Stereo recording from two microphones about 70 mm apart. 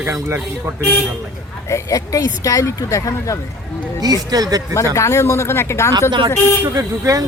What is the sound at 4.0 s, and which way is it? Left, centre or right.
Speech, right.